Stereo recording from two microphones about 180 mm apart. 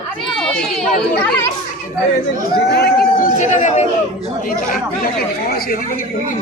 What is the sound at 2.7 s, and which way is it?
Speech, 65° left (ahead or behind).